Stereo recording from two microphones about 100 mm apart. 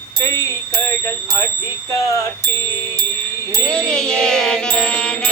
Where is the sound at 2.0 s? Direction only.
35° left (ahead or behind).